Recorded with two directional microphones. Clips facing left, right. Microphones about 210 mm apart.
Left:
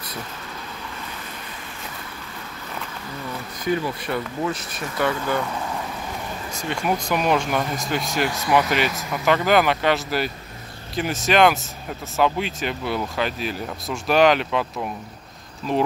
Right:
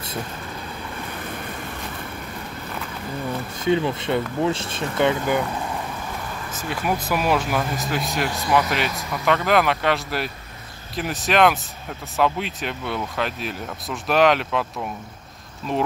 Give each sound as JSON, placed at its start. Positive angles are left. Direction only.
{"t": 3.6, "sound": "speech", "side_deg": -25}
{"t": 6.6, "sound": "speech", "side_deg": -5}